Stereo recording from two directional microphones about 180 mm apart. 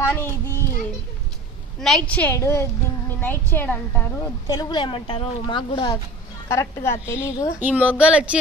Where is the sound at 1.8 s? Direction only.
5° left (ahead or behind).